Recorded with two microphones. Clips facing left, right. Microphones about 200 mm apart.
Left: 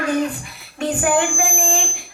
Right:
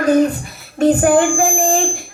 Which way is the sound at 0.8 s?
40° right (ahead or behind).